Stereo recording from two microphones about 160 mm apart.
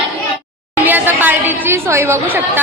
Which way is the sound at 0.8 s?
10° right (ahead or behind).